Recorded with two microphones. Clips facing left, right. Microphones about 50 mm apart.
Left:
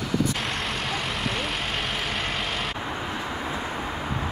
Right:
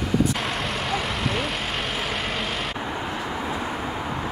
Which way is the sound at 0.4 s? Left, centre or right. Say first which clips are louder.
Right 2 dB; centre.